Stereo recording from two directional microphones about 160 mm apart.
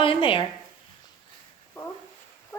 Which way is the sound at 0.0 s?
35° left (ahead or behind).